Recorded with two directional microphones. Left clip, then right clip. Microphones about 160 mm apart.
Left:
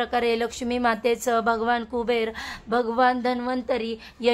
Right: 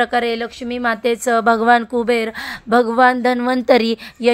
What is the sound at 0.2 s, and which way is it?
A woman's voice, 10° right (ahead or behind).